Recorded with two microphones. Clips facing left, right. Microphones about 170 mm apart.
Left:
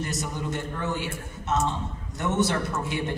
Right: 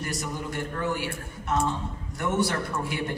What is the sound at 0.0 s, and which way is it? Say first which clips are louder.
A man's voice: left 1 dB; 20° left (ahead or behind).